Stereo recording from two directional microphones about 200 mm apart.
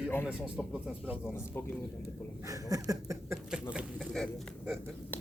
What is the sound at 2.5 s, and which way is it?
Speech, 15° right (ahead or behind).